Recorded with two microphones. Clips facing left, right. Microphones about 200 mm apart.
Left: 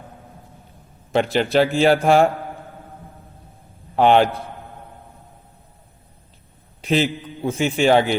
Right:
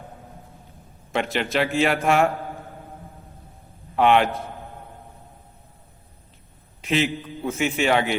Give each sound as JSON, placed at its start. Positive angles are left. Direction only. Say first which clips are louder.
{"t": 1.1, "sound": "a man's voice", "louder": "left 6 dB", "side_deg": 35}
{"t": 3.9, "sound": "a man's voice", "louder": "left 3 dB", "side_deg": 35}
{"t": 6.8, "sound": "a man's voice", "louder": "left 3 dB", "side_deg": 35}